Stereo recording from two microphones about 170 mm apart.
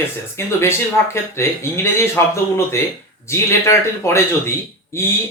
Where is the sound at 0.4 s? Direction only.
15° left (ahead or behind).